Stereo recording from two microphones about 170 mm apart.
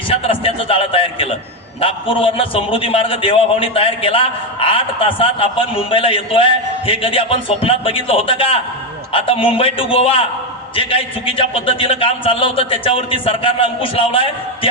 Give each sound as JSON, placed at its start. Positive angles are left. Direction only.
{"t": 0.1, "sound": "a man's voice", "side_deg": 35}